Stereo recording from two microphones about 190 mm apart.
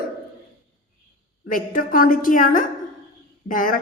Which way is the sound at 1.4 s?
45° left (ahead or behind).